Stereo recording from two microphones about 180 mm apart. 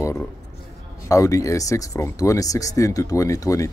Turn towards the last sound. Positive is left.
turn(degrees=20)  # may be behind; listen again after turning